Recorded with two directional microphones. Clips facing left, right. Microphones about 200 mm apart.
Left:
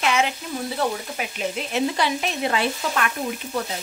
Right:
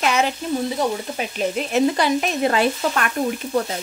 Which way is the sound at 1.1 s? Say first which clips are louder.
Right 5 dB; 40° right (ahead or behind).